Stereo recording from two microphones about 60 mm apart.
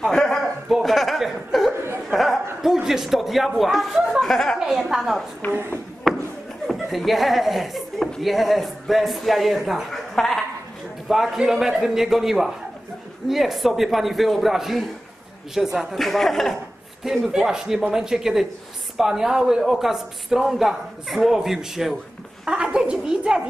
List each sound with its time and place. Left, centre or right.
0.0 s a sound: centre
2.6 s a man's voice: centre
4.3 s a woman's voice: centre
4.6 s a man's voice: centre
5.4 s speech: left
6.0 s a sound: centre
6.7 s chuckle: centre
8.2 s a man's voice: centre
17.3 s speech: centre
22.4 s speech: centre